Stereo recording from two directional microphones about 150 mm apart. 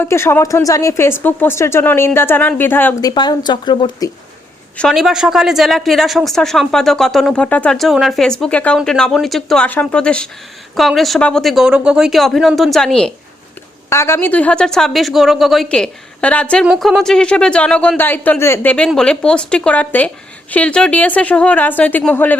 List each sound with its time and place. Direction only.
0.0 s speech: 15° left (ahead or behind)
3.0 s speech: 25° left (ahead or behind)
4.8 s a woman's voice: centre (ahead or behind)
13.9 s a woman's voice: 15° left (ahead or behind)